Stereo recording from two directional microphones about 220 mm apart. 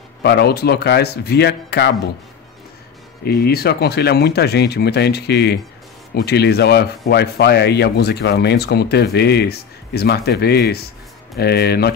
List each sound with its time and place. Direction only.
0.2 s rub: 50° left (ahead or behind)
3.3 s rub: 45° left (ahead or behind)